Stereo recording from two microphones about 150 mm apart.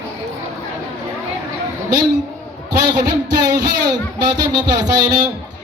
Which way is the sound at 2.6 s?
25° right (ahead or behind).